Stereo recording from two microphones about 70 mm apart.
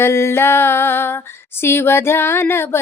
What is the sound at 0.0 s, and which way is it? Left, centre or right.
Music, left.